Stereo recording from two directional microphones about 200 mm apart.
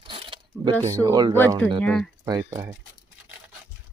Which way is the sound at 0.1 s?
25° right (ahead or behind).